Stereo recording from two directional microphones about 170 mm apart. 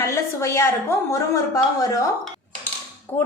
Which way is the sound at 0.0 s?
15° left (ahead or behind).